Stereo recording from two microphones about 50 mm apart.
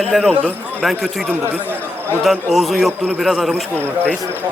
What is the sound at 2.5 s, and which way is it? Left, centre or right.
Speech, centre.